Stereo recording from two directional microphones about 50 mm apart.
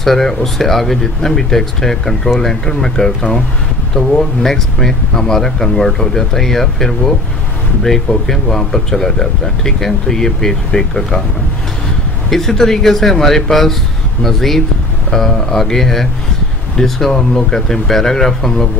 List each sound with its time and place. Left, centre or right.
0.0 s speech: centre
12.3 s speech: centre
17.3 s speech: centre
17.6 s speech: centre